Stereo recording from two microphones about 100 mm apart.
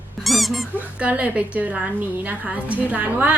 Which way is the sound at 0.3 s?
Centre (ahead or behind).